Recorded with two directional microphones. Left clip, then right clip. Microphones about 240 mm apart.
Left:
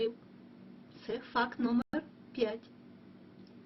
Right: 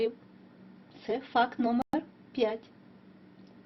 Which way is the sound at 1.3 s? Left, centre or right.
Centre.